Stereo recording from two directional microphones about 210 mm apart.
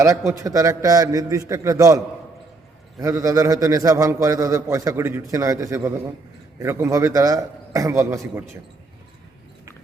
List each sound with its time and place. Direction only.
0.0 s a man's voice: 15° right (ahead or behind)
3.0 s a man's voice: 15° right (ahead or behind)